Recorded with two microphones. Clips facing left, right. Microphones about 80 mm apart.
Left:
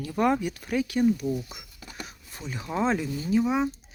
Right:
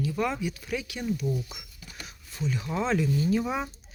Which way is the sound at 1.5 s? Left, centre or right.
Left.